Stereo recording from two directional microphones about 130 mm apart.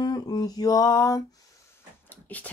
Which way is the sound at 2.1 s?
10° left (ahead or behind).